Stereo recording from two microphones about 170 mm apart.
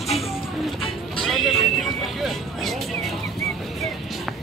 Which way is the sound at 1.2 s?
Centre (ahead or behind).